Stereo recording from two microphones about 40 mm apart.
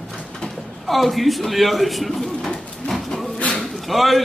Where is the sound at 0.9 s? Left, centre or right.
Centre.